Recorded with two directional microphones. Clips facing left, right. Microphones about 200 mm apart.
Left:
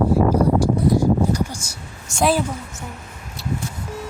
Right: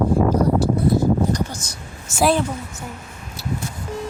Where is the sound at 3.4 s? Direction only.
Centre (ahead or behind).